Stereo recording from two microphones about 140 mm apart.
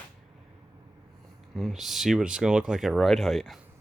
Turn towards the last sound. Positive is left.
turn(degrees=0)  # may be behind; listen again after turning